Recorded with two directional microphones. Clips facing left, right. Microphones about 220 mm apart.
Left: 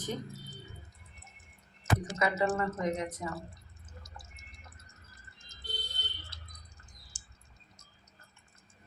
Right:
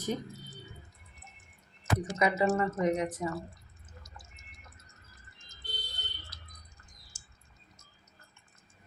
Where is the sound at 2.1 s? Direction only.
20° right (ahead or behind).